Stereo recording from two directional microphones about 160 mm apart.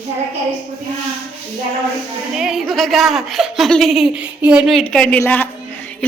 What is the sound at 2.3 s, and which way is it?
A woman's voice, 5° right (ahead or behind).